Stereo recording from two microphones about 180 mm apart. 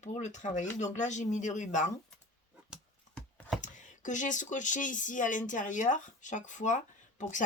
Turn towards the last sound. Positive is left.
turn(degrees=45)  # may be behind; listen again after turning